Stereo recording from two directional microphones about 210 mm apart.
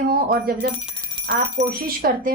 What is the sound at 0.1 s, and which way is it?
A woman's voice, 45° right (ahead or behind).